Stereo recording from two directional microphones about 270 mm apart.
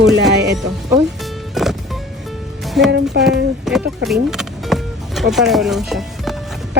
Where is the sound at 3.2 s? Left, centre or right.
Right.